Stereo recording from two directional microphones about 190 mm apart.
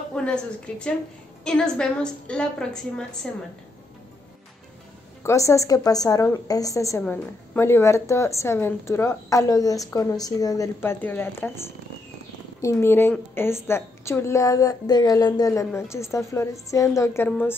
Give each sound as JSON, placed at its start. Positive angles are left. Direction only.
{"t": 0.1, "sound": "a woman's voice", "side_deg": 5}
{"t": 5.2, "sound": "a woman's voice", "side_deg": 15}
{"t": 12.6, "sound": "a woman's voice", "side_deg": 10}